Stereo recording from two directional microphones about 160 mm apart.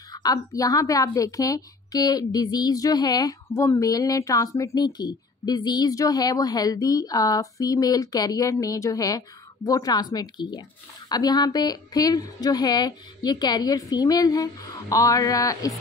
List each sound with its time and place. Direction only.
0.1 s a woman's voice: 25° left (ahead or behind)